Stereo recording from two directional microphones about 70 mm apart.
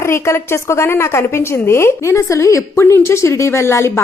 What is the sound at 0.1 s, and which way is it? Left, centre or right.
A woman's voice, left.